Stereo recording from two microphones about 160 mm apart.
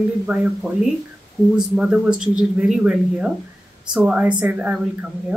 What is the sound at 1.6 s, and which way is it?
A woman's voice, 5° right (ahead or behind).